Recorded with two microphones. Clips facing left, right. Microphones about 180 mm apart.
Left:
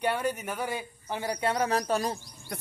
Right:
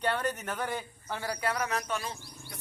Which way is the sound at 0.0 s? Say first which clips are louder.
Left 2 dB; 10° left (ahead or behind).